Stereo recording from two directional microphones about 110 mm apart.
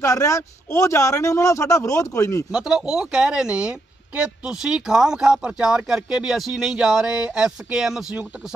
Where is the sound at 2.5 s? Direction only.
5° right (ahead or behind).